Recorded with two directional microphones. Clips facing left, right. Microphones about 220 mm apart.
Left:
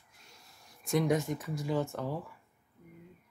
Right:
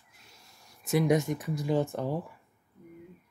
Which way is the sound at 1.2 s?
15° right (ahead or behind).